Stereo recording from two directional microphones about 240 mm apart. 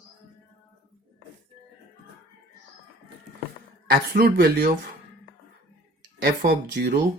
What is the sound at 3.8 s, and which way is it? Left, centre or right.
Speech, right.